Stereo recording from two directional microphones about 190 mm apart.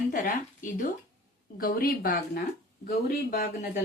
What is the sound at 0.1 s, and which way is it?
Speech, 45° left (ahead or behind).